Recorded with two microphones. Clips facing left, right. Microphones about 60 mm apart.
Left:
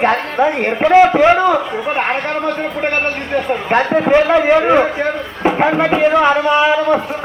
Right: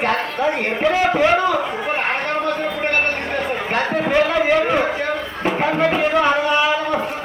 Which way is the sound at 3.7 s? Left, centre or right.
Left.